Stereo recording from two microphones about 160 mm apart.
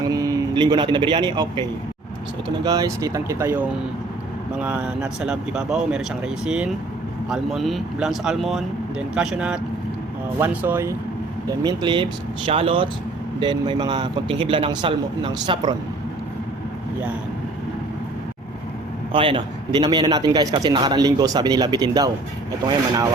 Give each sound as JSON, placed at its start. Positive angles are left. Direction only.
{"t": 0.0, "sound": "speech", "side_deg": -25}
{"t": 2.6, "sound": "a man's voice", "side_deg": -20}
{"t": 4.6, "sound": "speech", "side_deg": -10}
{"t": 11.4, "sound": "a man's voice", "side_deg": -25}
{"t": 19.1, "sound": "a man's voice", "side_deg": -35}